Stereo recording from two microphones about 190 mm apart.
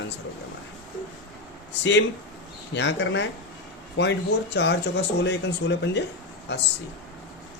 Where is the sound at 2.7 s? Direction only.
70° left (ahead or behind).